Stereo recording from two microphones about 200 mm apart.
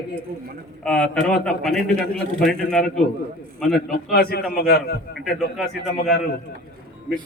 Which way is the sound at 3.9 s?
50° left (ahead or behind).